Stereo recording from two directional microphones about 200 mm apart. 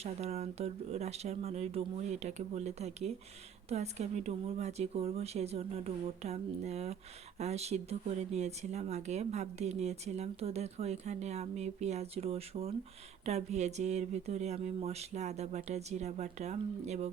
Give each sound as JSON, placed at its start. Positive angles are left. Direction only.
{"t": 0.0, "sound": "speech", "side_deg": -30}